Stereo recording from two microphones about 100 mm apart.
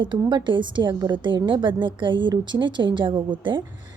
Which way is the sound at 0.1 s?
50° right (ahead or behind).